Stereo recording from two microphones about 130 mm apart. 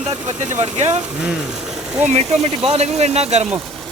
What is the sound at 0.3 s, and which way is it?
Speech, 65° right (ahead or behind).